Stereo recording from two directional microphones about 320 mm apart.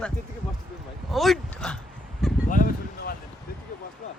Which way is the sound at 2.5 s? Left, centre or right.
Left.